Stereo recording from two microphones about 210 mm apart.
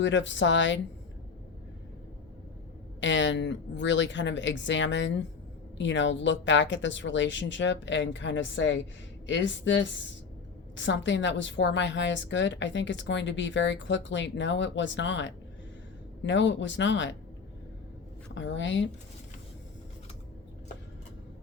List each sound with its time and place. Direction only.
0.0 s a woman's voice: 60° left (ahead or behind)
3.0 s a woman's voice: 60° left (ahead or behind)
18.3 s a woman's voice: 60° left (ahead or behind)